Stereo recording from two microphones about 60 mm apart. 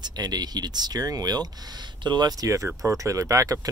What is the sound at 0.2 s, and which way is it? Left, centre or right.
Speech, right.